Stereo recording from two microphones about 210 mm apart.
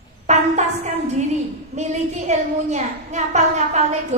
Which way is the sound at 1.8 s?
35° right (ahead or behind).